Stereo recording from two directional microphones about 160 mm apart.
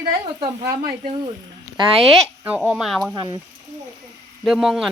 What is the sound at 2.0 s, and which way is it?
Speech, centre (ahead or behind).